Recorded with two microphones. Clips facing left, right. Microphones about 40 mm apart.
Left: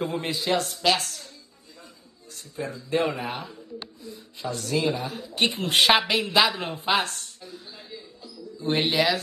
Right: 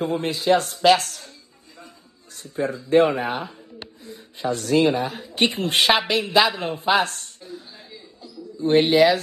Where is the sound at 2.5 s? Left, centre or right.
Right.